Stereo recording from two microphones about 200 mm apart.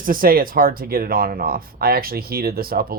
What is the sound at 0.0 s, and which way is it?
Speech, 45° right (ahead or behind).